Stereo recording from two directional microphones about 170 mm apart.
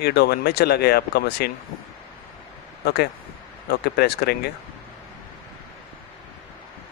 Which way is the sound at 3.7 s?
70° left (ahead or behind).